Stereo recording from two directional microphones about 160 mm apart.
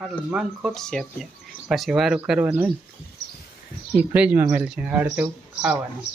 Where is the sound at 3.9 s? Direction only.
10° right (ahead or behind).